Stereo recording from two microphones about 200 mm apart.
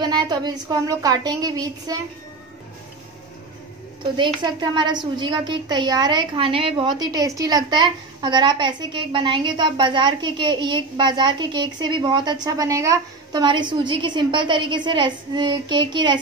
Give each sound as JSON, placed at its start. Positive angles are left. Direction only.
{"t": 0.0, "sound": "a woman's voice", "side_deg": -20}
{"t": 4.0, "sound": "a woman's voice", "side_deg": -25}